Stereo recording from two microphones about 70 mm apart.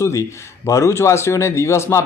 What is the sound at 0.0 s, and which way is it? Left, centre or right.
A man's voice, left.